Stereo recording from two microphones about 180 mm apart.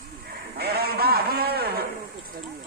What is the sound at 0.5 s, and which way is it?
Sheep, 60° right (ahead or behind).